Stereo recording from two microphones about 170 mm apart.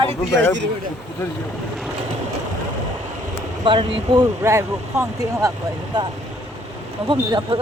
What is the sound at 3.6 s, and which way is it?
Speech, 30° right (ahead or behind).